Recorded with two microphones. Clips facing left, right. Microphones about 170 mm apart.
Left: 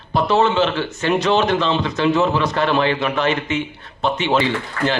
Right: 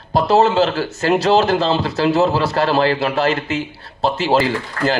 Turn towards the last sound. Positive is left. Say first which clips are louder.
# right 1 dB
turn(degrees=-35)  # may be behind; listen again after turning